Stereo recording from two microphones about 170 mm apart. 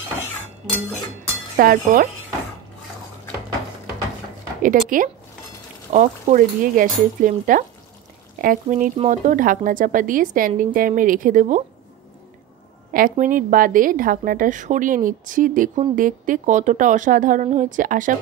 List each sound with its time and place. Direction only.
1.6 s speech: 60° right (ahead or behind)
4.6 s speech: 55° right (ahead or behind)
12.9 s speech: 55° right (ahead or behind)